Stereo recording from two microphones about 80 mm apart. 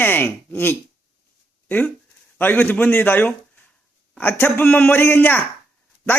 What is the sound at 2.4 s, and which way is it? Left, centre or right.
A man's voice, left.